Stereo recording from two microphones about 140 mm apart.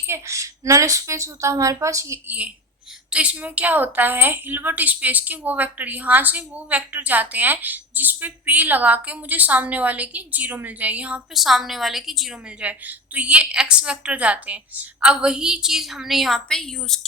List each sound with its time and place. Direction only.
0.1 s a woman's voice: 20° right (ahead or behind); by 17.1 s centre (ahead or behind)